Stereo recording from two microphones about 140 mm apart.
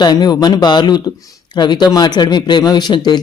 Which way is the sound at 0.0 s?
30° left (ahead or behind).